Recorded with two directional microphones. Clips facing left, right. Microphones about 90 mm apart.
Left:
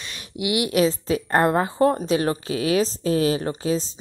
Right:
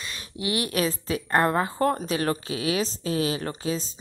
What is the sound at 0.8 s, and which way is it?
A woman's voice, 30° left (ahead or behind).